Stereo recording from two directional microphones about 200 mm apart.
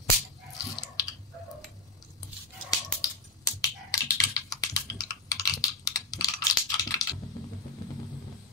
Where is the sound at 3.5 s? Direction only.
15° left (ahead or behind).